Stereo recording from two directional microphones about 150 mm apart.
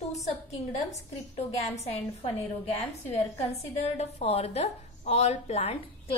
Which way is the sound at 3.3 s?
45° left (ahead or behind).